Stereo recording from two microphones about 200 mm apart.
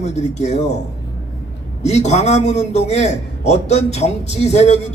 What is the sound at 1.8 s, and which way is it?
A man's voice, 35° left (ahead or behind).